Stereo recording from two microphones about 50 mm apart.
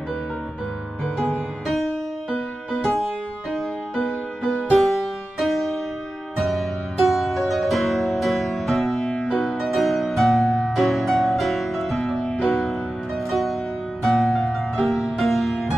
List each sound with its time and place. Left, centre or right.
3.5 s music: centre
4.6 s music: centre
9.6 s music: centre
14.4 s music: centre
14.9 s music: centre